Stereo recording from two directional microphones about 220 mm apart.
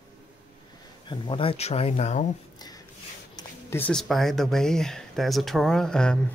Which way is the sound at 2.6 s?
15° left (ahead or behind).